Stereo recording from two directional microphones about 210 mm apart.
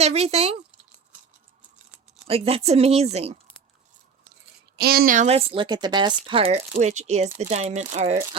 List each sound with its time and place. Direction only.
0.0 s speech: 30° right (ahead or behind)
2.2 s speech: 30° right (ahead or behind)
4.8 s speech: 45° right (ahead or behind); by 8.4 s 30° right (ahead or behind)